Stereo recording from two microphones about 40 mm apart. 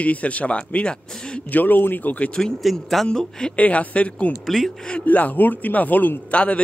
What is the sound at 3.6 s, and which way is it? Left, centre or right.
Speech, left.